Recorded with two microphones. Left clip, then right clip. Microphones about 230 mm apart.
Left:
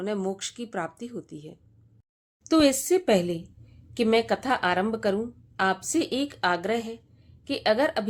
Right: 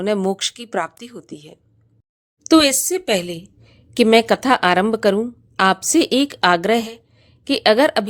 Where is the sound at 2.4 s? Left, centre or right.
Right.